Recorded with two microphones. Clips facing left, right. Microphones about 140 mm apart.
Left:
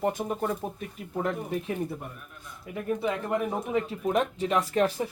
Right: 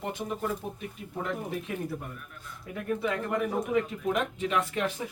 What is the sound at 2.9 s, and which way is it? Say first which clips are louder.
Speech: left 1 dB; 20° left (ahead or behind).